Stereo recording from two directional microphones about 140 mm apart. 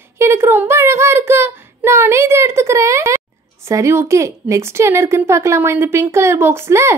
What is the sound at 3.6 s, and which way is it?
A woman's voice, 20° right (ahead or behind).